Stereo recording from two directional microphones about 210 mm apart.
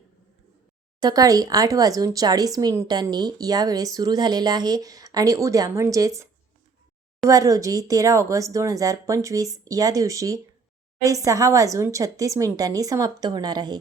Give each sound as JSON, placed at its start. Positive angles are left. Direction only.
{"t": 1.0, "sound": "speech", "side_deg": -15}
{"t": 7.3, "sound": "speech", "side_deg": -15}